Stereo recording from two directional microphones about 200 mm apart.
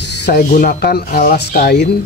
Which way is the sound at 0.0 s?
55° left (ahead or behind).